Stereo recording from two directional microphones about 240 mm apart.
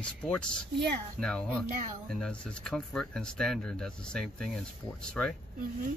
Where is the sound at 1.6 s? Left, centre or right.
Right.